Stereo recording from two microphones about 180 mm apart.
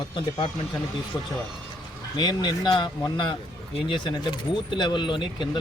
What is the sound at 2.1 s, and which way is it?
Speech, 25° left (ahead or behind).